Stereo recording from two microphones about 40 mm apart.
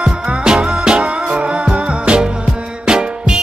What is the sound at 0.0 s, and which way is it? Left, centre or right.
Music, right.